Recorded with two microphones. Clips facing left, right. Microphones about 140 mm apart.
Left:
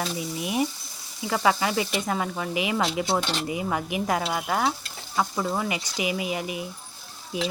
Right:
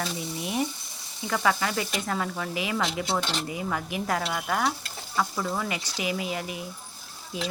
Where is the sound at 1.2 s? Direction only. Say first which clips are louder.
Left 3 dB; 15° left (ahead or behind).